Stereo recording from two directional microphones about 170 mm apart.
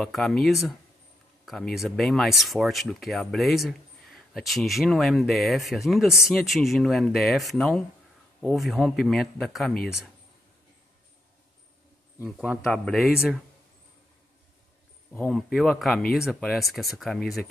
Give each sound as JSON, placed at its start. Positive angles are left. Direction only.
{"t": 0.0, "sound": "speech", "side_deg": 0}
{"t": 12.3, "sound": "speech", "side_deg": 0}
{"t": 15.1, "sound": "speech", "side_deg": 5}